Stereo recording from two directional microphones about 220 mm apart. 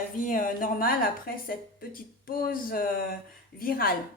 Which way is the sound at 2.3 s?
40° left (ahead or behind).